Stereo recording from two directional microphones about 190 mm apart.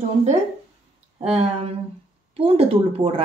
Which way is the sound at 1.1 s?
30° right (ahead or behind).